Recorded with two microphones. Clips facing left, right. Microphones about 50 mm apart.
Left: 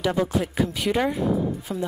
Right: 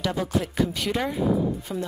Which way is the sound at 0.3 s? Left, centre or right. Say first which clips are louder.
Even; centre.